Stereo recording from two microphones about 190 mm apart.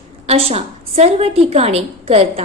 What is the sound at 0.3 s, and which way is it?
A woman's voice, 30° right (ahead or behind).